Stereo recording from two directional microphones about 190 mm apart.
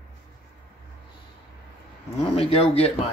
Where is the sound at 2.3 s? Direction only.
30° left (ahead or behind).